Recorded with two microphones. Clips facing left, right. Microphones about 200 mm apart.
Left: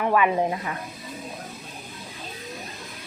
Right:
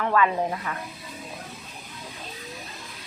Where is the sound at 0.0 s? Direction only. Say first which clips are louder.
Left 2 dB; 15° left (ahead or behind).